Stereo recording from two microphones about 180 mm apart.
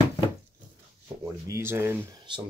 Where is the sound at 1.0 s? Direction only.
15° right (ahead or behind).